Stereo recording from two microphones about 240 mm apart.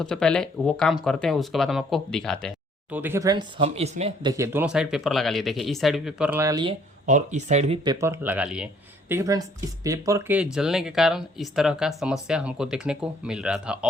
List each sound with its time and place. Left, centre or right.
0.0 s speech: centre
2.9 s speech: centre
7.0 s speech: right
7.9 s speech: centre